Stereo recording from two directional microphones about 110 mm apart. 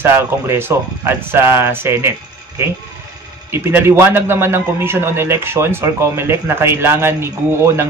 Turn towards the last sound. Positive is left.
turn(degrees=-25)  # may be behind; listen again after turning